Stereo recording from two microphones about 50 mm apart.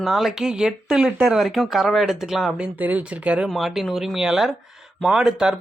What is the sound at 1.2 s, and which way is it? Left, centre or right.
Speech, centre.